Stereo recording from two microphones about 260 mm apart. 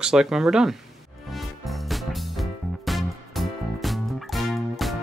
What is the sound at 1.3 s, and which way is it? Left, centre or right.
Music, centre.